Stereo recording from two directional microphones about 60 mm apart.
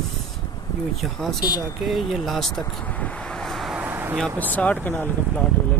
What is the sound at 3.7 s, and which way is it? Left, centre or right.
Vehicle, right.